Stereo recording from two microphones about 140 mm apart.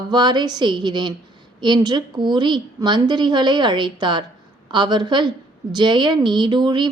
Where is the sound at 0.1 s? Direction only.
30° right (ahead or behind).